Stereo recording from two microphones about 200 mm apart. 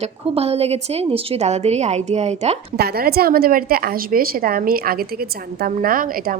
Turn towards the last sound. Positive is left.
turn(degrees=-45)  # may be behind; listen again after turning